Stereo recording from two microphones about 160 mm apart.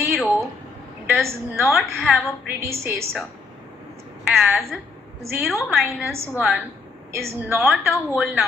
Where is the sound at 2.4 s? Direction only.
15° right (ahead or behind).